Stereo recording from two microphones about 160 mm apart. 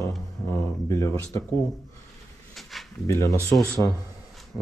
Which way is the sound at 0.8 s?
20° left (ahead or behind).